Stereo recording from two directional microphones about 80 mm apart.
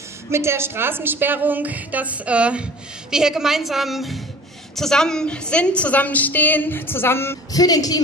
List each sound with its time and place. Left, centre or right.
0.3 s a woman's voice: right; by 7.3 s left
7.5 s a woman's voice: left